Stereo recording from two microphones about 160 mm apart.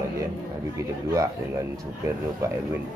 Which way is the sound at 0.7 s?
20° right (ahead or behind).